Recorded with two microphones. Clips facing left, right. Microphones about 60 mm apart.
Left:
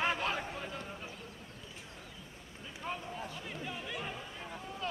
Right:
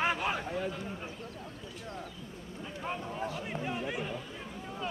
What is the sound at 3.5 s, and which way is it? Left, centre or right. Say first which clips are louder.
Speech: right 6 dB; right.